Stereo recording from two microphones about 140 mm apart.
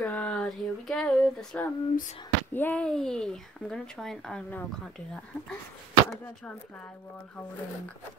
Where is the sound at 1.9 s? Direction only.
65° left (ahead or behind).